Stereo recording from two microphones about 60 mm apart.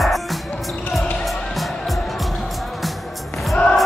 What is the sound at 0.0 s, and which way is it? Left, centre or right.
Music, centre.